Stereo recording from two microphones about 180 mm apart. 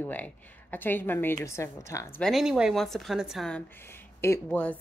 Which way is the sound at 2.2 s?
Centre (ahead or behind).